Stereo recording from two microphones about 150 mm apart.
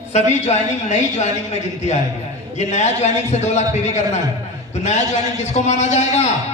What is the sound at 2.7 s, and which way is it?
A man's voice, 50° left (ahead or behind).